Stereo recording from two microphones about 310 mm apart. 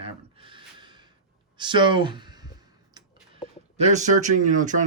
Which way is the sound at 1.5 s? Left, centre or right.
Centre.